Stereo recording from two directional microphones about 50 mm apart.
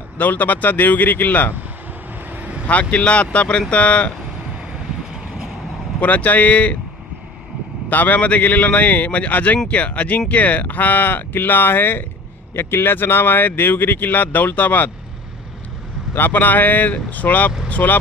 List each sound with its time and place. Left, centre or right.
0.2 s speech: left
2.3 s vehicle: right
2.6 s speech: left
5.9 s speech: left
7.9 s speech: left
16.2 s speech: left